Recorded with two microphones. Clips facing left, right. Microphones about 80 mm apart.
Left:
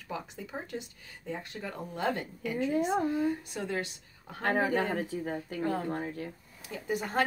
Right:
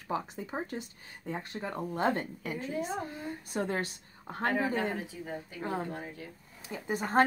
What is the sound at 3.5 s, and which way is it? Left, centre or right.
Speech, right.